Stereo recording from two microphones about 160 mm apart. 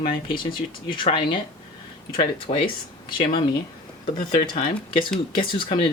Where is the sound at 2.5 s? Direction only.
30° left (ahead or behind).